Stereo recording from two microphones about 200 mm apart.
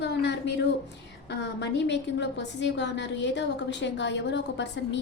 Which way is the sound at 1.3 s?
60° left (ahead or behind).